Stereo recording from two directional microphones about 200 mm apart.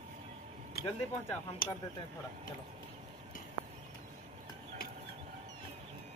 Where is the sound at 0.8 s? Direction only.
50° left (ahead or behind).